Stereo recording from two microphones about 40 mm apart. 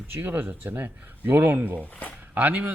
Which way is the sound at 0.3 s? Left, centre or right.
Right.